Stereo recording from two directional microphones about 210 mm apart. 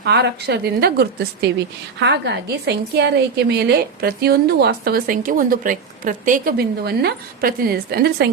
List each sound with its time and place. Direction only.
0.0 s a woman's voice: 50° right (ahead or behind)